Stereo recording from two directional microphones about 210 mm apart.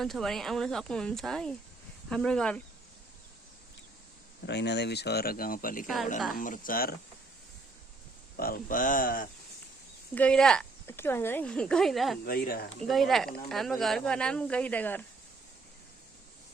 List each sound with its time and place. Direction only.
0.0 s speech: centre (ahead or behind)
4.4 s speech: 55° left (ahead or behind)
8.4 s speech: 45° left (ahead or behind)
10.2 s speech: 5° left (ahead or behind)
12.2 s speech: 45° left (ahead or behind)
12.9 s speech: centre (ahead or behind)